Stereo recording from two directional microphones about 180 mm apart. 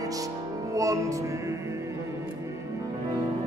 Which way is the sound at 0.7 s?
20° right (ahead or behind).